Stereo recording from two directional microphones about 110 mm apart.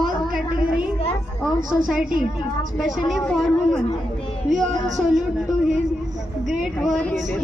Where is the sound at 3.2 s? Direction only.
5° left (ahead or behind).